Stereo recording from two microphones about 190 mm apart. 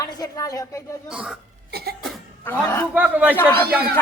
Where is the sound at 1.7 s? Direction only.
55° right (ahead or behind).